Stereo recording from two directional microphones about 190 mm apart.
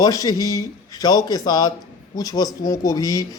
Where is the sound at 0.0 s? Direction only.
20° left (ahead or behind).